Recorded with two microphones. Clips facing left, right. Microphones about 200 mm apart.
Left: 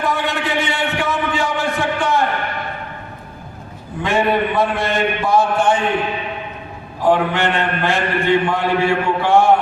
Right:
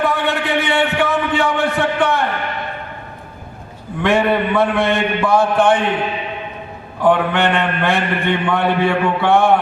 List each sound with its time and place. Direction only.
0.0 s a sound: 60° right (ahead or behind)
4.0 s a man's voice: 60° right (ahead or behind)
7.0 s a man's voice: 60° right (ahead or behind)